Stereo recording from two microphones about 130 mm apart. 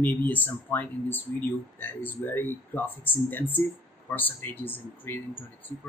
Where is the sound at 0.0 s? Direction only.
15° left (ahead or behind).